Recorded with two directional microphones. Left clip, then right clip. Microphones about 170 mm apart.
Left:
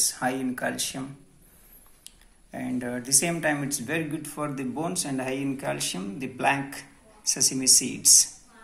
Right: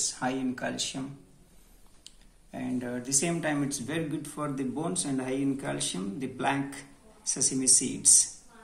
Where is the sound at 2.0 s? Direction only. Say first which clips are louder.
Left 1 dB; 15° left (ahead or behind).